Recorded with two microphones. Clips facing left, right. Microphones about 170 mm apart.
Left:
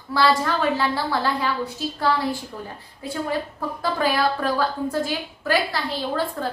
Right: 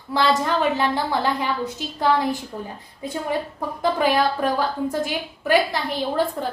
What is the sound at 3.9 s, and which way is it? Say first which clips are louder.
A woman's voice: right 1 dB; 20° right (ahead or behind).